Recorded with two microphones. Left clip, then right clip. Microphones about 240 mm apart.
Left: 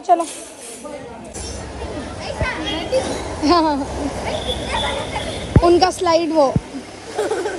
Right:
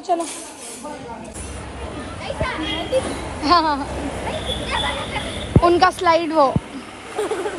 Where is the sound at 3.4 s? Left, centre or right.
Centre.